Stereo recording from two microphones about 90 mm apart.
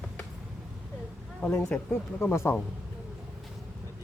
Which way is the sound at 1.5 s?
20° left (ahead or behind).